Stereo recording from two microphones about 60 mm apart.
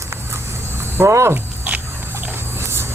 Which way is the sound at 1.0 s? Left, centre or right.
Right.